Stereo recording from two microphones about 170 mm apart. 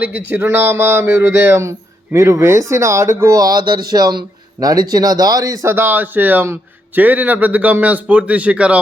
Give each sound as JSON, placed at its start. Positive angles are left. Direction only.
{"t": 0.0, "sound": "speech", "side_deg": -10}